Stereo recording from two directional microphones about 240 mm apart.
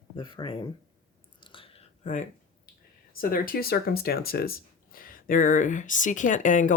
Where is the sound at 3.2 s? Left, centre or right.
Left.